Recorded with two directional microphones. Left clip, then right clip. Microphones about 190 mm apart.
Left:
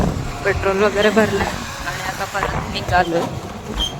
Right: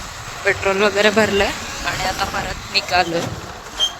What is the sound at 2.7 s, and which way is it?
Speech, 20° left (ahead or behind).